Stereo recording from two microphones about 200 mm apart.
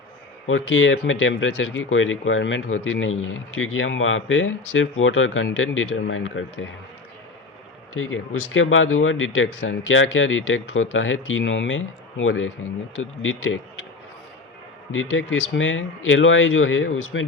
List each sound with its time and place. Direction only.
0.4 s speech: 80° left
7.9 s speech: 90° left
14.9 s speech: 85° left